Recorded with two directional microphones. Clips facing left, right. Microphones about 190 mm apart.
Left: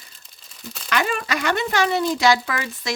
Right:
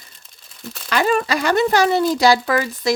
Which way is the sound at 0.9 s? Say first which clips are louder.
Right 5 dB; 35° right (ahead or behind).